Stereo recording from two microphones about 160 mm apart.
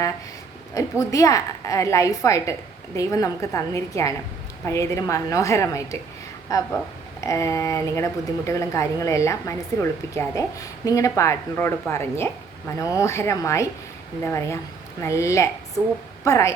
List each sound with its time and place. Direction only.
0.7 s a woman's voice: 20° left (ahead or behind)